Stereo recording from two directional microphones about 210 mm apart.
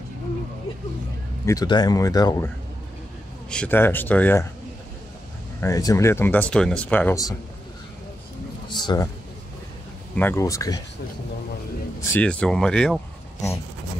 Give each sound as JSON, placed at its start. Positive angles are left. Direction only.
{"t": 1.4, "sound": "speech", "side_deg": 15}
{"t": 3.4, "sound": "speech", "side_deg": 5}
{"t": 5.6, "sound": "speech", "side_deg": 15}
{"t": 8.6, "sound": "a man's voice", "side_deg": 20}
{"t": 10.1, "sound": "speech", "side_deg": 10}
{"t": 12.1, "sound": "speech", "side_deg": 5}